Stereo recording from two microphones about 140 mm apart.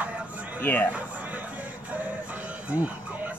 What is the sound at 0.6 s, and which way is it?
Speech, 15° left (ahead or behind).